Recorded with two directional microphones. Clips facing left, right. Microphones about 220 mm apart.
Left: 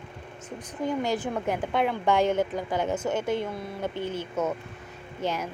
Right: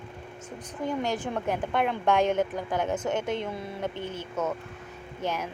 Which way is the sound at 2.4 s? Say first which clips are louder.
Left 1 dB; 10° left (ahead or behind).